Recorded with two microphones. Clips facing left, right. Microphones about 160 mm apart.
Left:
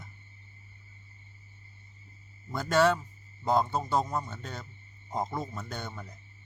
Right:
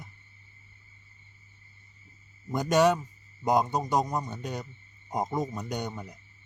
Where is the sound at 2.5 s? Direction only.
15° right (ahead or behind).